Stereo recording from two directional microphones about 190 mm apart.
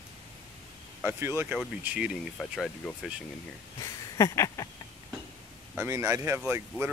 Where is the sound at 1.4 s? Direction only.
10° right (ahead or behind).